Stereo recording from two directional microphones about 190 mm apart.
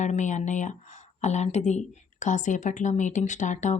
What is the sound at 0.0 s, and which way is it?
Speech, 40° left (ahead or behind).